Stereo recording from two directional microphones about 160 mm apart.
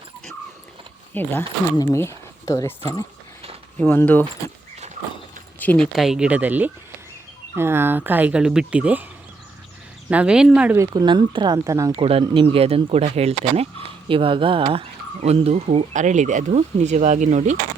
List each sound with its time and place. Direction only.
1.1 s speech: 10° left (ahead or behind)
3.8 s speech: 10° left (ahead or behind)
5.5 s speech: 5° left (ahead or behind); by 9.0 s 10° right (ahead or behind)
10.1 s speech: 5° right (ahead or behind)
10.8 s speech: 25° right (ahead or behind)
11.9 s speech: 35° right (ahead or behind)